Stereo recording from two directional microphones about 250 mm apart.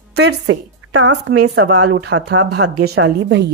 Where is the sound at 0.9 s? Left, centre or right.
Right.